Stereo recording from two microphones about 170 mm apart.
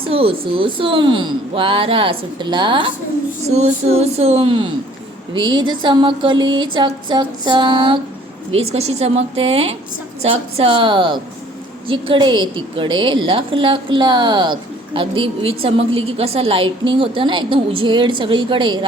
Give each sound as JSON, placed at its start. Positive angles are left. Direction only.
{"t": 0.1, "sound": "speech", "side_deg": -35}
{"t": 3.4, "sound": "a woman's voice", "side_deg": -40}